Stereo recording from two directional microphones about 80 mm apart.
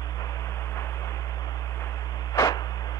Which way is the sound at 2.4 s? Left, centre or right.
Left.